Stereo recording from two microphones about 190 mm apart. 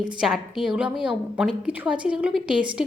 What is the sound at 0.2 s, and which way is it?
A woman's voice, 5° right (ahead or behind).